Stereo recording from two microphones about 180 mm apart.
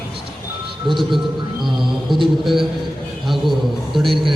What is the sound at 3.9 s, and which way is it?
Mantra, centre (ahead or behind).